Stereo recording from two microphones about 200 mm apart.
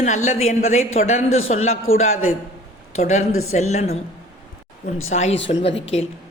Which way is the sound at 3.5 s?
35° left (ahead or behind).